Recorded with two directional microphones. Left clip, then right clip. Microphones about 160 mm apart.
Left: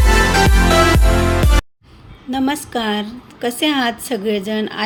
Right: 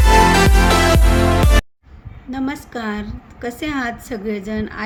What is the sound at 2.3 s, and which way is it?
A woman's voice, 10° left (ahead or behind).